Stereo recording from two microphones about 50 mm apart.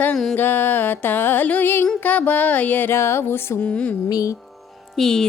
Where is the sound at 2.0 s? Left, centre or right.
Left.